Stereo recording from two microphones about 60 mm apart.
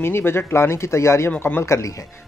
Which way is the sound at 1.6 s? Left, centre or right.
Left.